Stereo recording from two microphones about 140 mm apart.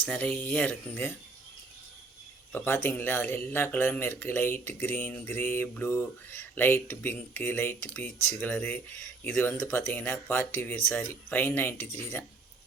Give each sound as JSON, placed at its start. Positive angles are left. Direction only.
{"t": 0.0, "sound": "speech", "side_deg": 10}
{"t": 2.5, "sound": "speech", "side_deg": 15}